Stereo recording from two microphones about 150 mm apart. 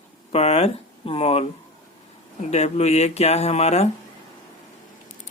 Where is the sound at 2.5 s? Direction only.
45° left (ahead or behind).